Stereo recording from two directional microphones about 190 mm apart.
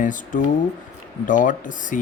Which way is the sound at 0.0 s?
45° left (ahead or behind).